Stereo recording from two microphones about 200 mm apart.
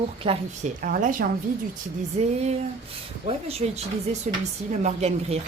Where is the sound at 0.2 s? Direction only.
35° right (ahead or behind).